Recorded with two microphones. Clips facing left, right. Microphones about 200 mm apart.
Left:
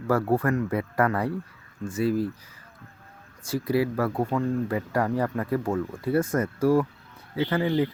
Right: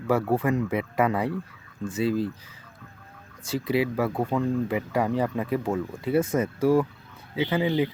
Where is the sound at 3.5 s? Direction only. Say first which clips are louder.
Even; 25° right (ahead or behind).